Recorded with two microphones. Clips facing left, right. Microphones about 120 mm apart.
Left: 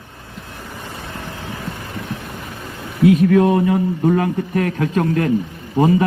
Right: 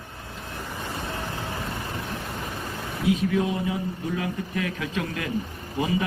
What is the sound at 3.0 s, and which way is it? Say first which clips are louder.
A man's voice: left 11 dB; 60° left (ahead or behind).